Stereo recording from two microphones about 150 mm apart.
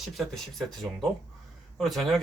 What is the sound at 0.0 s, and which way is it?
Speech, centre (ahead or behind).